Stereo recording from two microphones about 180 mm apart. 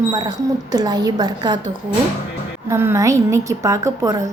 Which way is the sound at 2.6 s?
15° right (ahead or behind).